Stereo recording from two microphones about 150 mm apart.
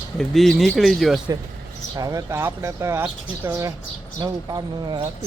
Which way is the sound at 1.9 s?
25° right (ahead or behind).